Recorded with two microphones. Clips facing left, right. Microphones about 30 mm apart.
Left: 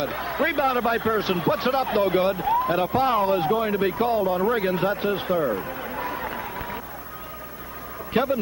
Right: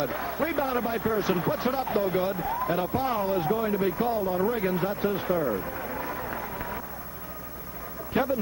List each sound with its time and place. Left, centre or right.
0.0 s speech: left
5.6 s a sound: left
6.0 s run: left
8.2 s speech: left